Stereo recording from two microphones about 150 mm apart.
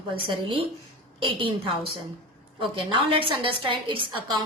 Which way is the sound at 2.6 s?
35° right (ahead or behind).